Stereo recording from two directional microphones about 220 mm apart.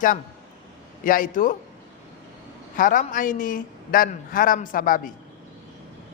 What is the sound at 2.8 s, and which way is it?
A woman's voice, 35° left (ahead or behind).